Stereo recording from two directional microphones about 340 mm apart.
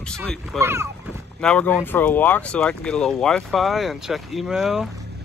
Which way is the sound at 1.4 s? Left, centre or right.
Centre.